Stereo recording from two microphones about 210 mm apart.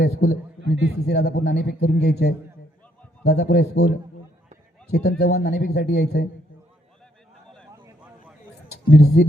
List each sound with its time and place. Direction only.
0.0 s a man's voice: 50° left (ahead or behind)
7.7 s a sound: 15° right (ahead or behind)
8.7 s speech: 50° left (ahead or behind)